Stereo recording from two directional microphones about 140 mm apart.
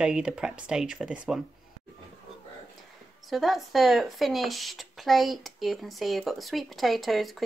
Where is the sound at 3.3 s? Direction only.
Centre (ahead or behind).